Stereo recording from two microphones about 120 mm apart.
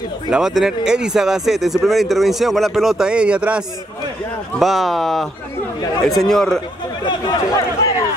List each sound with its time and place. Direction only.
0.3 s speech: 5° right (ahead or behind)
7.1 s speech: 35° left (ahead or behind)